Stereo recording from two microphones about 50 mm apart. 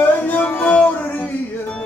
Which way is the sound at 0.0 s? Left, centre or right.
Left.